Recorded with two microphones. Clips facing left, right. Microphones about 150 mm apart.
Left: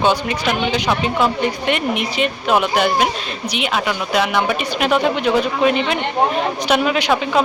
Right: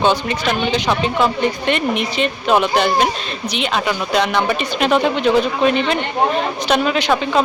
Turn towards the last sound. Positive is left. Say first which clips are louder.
# even
turn(degrees=5)  # may be behind; listen again after turning